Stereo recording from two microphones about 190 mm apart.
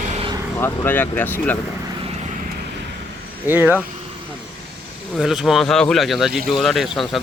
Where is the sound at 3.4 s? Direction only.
10° right (ahead or behind).